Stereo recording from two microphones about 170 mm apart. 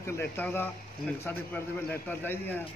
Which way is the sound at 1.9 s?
10° left (ahead or behind).